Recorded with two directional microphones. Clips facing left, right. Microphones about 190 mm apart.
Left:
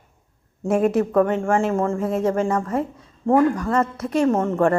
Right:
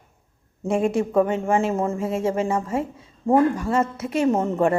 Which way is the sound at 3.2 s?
10° left (ahead or behind).